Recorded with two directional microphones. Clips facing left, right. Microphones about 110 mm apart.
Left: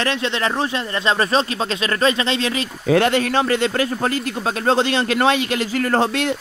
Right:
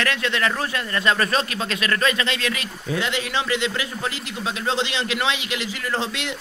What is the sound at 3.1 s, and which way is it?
A man's voice, 45° left (ahead or behind).